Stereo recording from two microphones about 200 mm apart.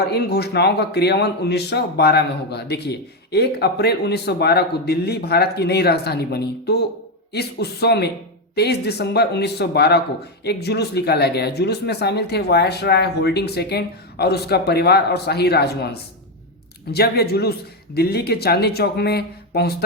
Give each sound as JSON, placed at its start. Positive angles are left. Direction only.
{"t": 0.0, "sound": "a man's voice", "side_deg": 55}